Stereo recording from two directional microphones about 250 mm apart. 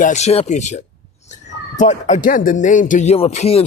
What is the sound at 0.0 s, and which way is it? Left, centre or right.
Speech, left.